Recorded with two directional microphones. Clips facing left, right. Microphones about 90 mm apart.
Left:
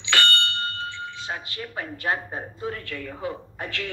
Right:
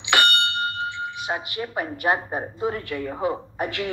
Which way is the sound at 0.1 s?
20° right (ahead or behind).